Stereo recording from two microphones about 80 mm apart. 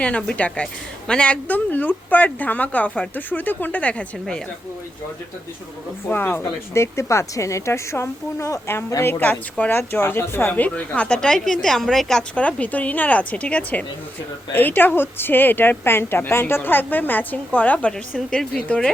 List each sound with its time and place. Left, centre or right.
0.0 s a woman's voice: centre
6.1 s a woman's voice: left; by 18.9 s centre